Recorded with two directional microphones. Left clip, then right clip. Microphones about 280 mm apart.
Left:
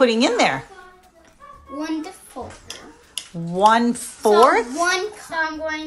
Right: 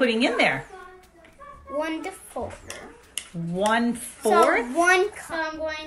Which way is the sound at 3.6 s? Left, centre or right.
Centre.